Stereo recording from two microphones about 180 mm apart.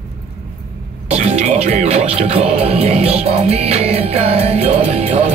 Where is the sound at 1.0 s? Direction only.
35° right (ahead or behind).